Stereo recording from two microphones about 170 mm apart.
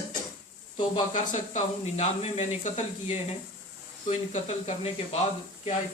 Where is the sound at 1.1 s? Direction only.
45° left (ahead or behind).